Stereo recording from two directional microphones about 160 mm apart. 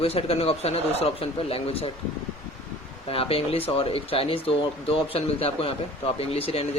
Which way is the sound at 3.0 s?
35° left (ahead or behind).